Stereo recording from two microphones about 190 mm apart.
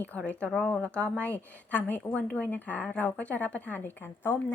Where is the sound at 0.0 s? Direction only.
10° left (ahead or behind).